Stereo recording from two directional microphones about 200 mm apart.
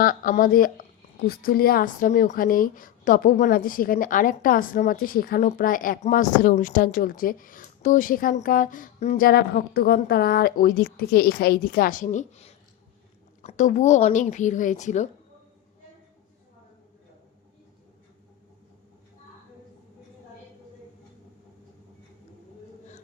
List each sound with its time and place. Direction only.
0.0 s a woman's voice: 45° left (ahead or behind)
9.2 s a woman's voice: 50° left (ahead or behind)